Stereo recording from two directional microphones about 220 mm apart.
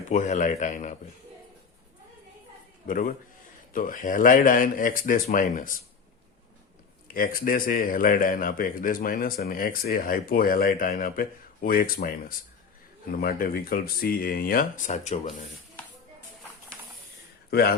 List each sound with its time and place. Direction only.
0.1 s a man's voice: 35° left (ahead or behind)
2.8 s a man's voice: 40° left (ahead or behind)
7.1 s a man's voice: 40° left (ahead or behind)
17.5 s speech: 45° left (ahead or behind)